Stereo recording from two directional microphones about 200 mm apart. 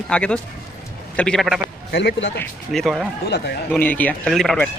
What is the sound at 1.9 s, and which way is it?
Speech, 60° left (ahead or behind).